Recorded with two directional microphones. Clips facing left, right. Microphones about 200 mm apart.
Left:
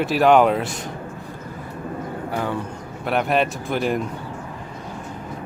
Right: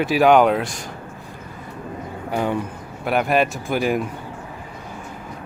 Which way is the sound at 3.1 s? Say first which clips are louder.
Right 1 dB; 5° right (ahead or behind).